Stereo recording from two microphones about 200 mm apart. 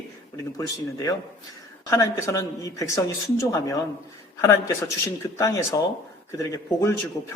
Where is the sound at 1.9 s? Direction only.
15° left (ahead or behind).